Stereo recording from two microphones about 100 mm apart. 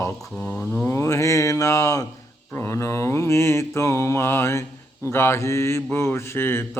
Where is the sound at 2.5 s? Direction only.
25° left (ahead or behind).